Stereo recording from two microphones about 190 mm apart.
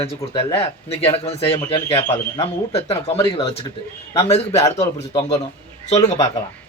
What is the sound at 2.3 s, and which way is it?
Speech, 20° left (ahead or behind).